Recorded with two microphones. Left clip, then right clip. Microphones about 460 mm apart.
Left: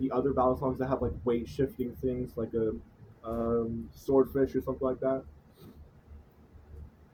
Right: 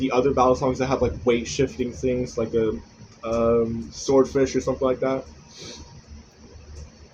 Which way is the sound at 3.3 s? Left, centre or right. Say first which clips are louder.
Right 10 dB; left.